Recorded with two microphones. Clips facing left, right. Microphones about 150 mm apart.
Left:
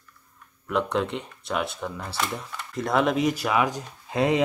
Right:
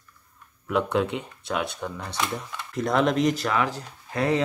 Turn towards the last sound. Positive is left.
turn(degrees=15)  # may be behind; listen again after turning